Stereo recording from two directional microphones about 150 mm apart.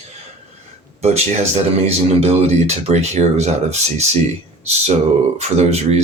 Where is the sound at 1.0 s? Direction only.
45° right (ahead or behind).